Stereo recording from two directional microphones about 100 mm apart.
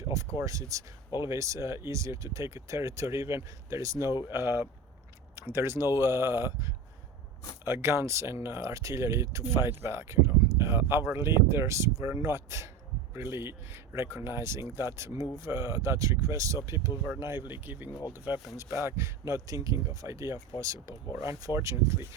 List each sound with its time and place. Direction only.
0.3 s speech: 30° right (ahead or behind)